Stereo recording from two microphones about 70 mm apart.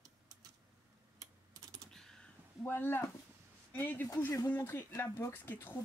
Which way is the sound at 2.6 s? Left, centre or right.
Left.